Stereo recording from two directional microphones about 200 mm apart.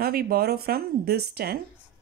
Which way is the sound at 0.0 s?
50° right (ahead or behind).